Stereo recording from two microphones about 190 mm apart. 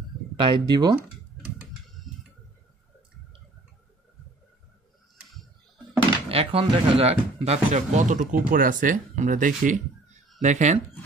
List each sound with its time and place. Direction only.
0.4 s speech: 25° right (ahead or behind)
5.1 s a sound: centre (ahead or behind)
6.2 s speech: 30° right (ahead or behind)